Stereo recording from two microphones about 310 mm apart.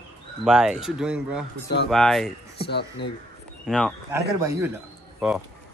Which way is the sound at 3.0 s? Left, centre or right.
Left.